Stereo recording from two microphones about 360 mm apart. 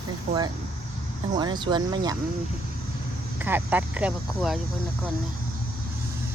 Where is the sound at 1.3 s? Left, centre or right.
Centre.